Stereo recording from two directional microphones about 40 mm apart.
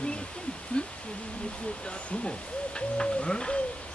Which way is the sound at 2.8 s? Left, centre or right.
Left.